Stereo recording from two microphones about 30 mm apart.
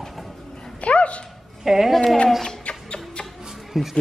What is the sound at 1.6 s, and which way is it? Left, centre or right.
Speech, centre.